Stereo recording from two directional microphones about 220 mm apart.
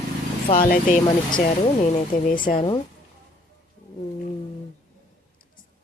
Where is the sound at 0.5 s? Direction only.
40° left (ahead or behind).